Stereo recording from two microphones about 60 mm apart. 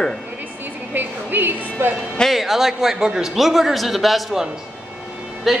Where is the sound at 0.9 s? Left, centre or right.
Right.